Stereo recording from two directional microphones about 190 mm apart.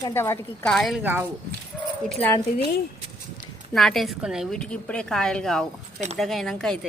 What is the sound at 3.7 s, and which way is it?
Speech, centre (ahead or behind).